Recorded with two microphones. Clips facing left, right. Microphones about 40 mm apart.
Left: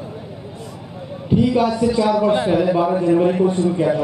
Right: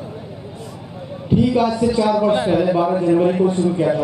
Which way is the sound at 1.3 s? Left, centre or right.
Centre.